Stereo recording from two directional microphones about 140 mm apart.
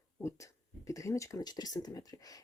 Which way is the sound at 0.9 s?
20° left (ahead or behind).